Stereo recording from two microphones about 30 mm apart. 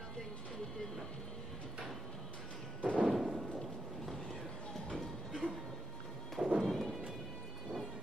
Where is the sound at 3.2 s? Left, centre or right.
Centre.